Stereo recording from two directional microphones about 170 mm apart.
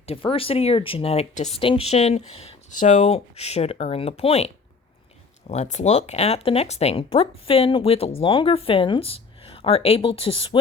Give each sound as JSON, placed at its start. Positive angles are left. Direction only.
{"t": 0.0, "sound": "speech", "side_deg": 35}